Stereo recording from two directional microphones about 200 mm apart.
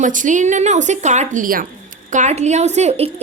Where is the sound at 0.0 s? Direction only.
40° right (ahead or behind).